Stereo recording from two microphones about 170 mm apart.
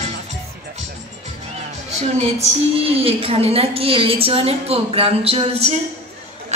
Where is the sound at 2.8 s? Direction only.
35° right (ahead or behind).